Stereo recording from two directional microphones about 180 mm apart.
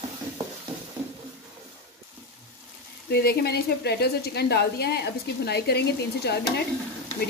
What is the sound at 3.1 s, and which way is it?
Speech, 60° left (ahead or behind).